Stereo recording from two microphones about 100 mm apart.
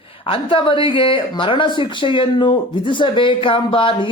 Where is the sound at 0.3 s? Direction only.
60° left (ahead or behind).